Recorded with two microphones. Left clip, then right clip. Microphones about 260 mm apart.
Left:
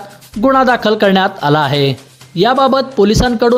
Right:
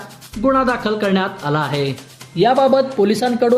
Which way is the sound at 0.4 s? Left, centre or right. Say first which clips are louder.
Left 6 dB; left.